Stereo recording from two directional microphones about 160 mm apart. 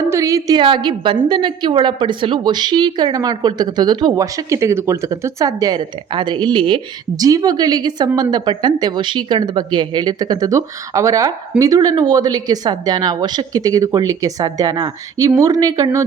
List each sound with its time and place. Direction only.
0.0 s a woman's voice: 20° right (ahead or behind)